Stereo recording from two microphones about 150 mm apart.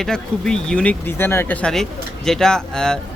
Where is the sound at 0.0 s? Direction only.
5° left (ahead or behind).